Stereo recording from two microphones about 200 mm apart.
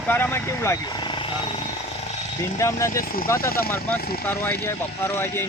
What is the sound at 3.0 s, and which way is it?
Speech, 45° left (ahead or behind).